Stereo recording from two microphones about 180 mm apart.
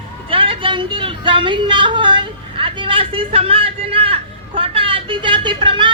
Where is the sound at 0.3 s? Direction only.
30° right (ahead or behind).